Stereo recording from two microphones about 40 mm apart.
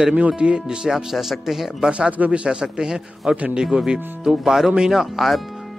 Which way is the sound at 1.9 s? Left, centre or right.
Right.